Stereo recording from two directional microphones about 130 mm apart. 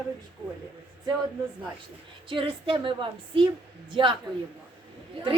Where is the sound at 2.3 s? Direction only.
40° right (ahead or behind).